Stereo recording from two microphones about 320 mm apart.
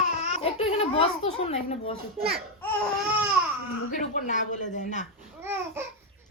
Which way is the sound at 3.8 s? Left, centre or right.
Left.